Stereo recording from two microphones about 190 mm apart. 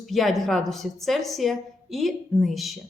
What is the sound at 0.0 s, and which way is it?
Speech, centre (ahead or behind).